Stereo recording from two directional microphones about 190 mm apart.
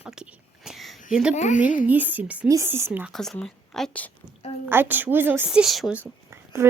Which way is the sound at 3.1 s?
Centre (ahead or behind).